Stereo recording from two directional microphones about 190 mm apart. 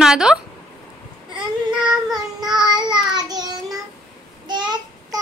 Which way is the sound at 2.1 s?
20° right (ahead or behind).